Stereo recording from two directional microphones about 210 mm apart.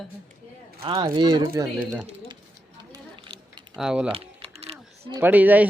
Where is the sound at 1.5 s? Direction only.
5° right (ahead or behind).